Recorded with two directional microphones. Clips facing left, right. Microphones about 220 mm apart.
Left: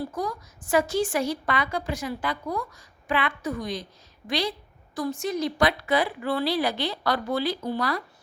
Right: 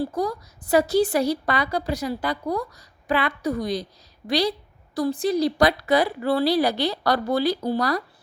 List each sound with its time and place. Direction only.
0.2 s a woman's voice: 35° right (ahead or behind)